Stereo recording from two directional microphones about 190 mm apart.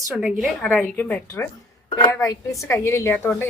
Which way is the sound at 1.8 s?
25° left (ahead or behind).